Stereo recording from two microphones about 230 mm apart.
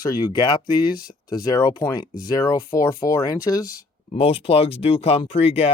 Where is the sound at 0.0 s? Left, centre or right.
Centre.